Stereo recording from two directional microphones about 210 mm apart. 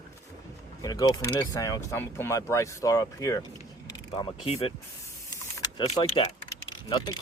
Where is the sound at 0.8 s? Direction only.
15° left (ahead or behind).